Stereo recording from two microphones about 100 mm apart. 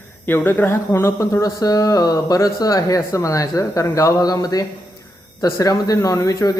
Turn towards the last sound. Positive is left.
turn(degrees=35)  # may be behind; listen again after turning